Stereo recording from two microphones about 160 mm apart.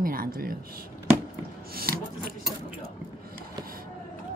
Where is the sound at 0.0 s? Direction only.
60° right (ahead or behind).